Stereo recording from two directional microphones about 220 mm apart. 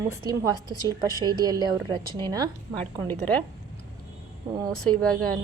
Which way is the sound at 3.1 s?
5° left (ahead or behind).